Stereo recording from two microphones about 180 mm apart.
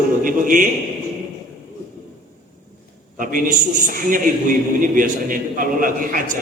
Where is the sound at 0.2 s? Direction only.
50° right (ahead or behind).